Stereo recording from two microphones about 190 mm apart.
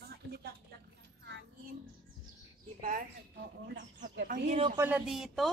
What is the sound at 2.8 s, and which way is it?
Speech, 50° right (ahead or behind).